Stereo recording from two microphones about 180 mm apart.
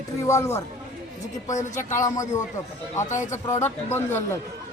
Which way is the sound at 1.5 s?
40° left (ahead or behind).